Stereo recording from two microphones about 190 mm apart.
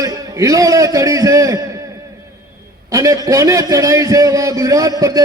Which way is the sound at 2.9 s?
20° right (ahead or behind).